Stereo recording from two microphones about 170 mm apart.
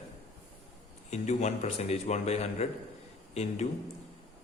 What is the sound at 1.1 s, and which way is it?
A man's voice, 40° left (ahead or behind).